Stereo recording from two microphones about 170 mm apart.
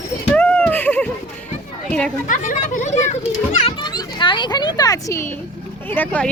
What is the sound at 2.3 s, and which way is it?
Speech, 50° left (ahead or behind).